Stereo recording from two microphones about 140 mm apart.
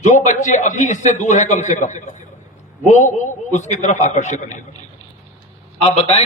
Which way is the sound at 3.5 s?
60° left (ahead or behind).